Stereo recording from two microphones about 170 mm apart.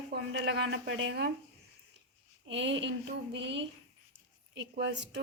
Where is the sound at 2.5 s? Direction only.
90° right.